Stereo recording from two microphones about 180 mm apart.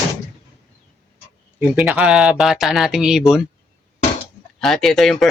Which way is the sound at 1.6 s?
5° right (ahead or behind).